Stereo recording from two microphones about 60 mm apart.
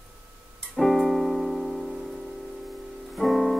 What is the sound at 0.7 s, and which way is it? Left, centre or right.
Music, centre.